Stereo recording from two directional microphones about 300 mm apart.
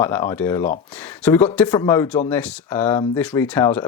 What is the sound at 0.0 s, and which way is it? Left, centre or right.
Speech, centre.